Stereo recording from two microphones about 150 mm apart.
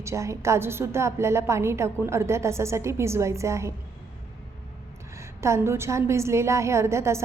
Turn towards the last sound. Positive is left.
turn(degrees=-20)  # may be behind; listen again after turning